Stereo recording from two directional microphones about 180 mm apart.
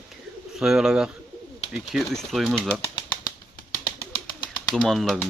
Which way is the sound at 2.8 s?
25° left (ahead or behind).